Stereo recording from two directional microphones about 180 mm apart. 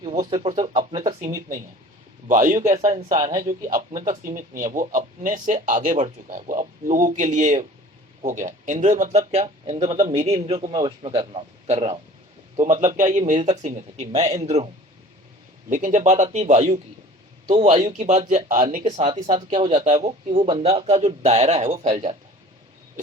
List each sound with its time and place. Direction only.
0.2 s speech: 20° right (ahead or behind)
0.7 s speech: 35° right (ahead or behind)
2.2 s speech: 45° right (ahead or behind)
3.2 s speech: 20° right (ahead or behind)
3.7 s speech: 45° right (ahead or behind)
15.7 s speech: 45° right (ahead or behind)